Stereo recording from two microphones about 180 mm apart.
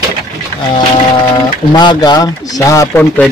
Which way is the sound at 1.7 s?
25° left (ahead or behind).